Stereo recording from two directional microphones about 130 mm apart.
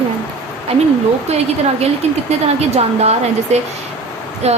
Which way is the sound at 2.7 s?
55° right (ahead or behind).